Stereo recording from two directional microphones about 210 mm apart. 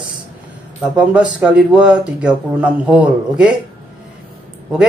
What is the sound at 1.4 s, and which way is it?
Speech, 5° right (ahead or behind).